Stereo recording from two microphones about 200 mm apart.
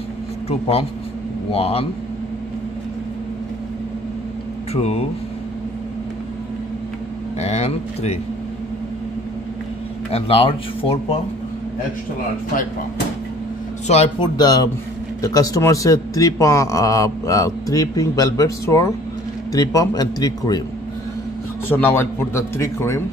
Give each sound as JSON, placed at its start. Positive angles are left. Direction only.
{"t": 0.5, "sound": "a man's voice", "side_deg": 30}
{"t": 4.7, "sound": "speech", "side_deg": 30}
{"t": 7.3, "sound": "speech", "side_deg": 35}
{"t": 10.1, "sound": "a man's voice", "side_deg": 30}
{"t": 13.9, "sound": "speech", "side_deg": 35}
{"t": 14.3, "sound": "a man's voice", "side_deg": 20}
{"t": 21.6, "sound": "a man's voice", "side_deg": 10}